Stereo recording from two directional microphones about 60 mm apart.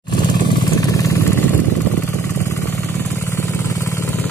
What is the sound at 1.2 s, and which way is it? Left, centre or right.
Vehicle, left.